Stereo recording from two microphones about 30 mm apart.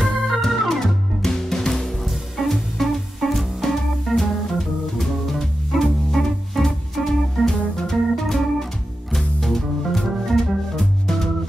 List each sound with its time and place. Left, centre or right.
0.0 s organ: centre
1.2 s music: centre
2.0 s music: centre
7.1 s organ: centre
9.1 s music: centre